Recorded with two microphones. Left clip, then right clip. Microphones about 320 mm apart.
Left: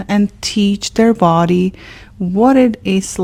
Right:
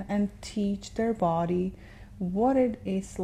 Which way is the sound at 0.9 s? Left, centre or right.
Left.